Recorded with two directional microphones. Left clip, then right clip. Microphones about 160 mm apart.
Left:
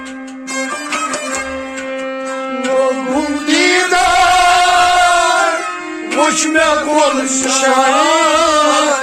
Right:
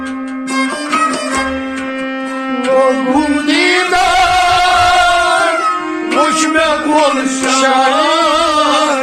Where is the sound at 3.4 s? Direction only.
30° left (ahead or behind).